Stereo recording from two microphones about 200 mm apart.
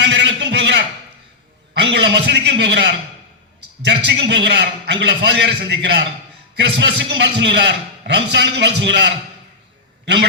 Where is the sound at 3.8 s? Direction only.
60° right (ahead or behind).